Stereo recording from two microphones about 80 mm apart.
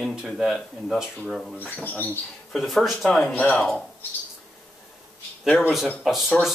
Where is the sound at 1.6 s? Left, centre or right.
Left.